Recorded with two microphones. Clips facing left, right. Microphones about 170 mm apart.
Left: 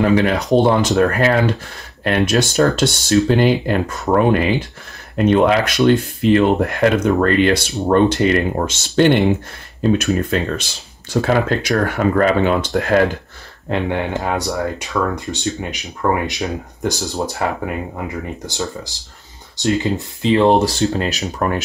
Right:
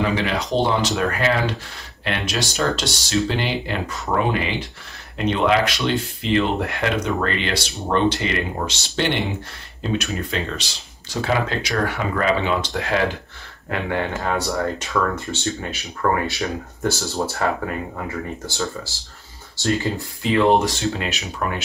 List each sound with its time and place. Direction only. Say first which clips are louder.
0.1 s speech: left 7 dB; 50° left (ahead or behind)
13.7 s speech: left 4 dB; 20° left (ahead or behind); by 21.6 s 45° left (ahead or behind)